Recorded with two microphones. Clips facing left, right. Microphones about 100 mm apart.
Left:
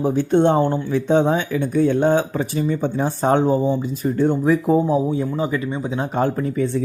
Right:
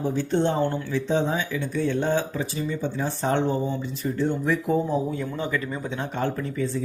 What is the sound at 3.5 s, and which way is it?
Speech, 15° left (ahead or behind).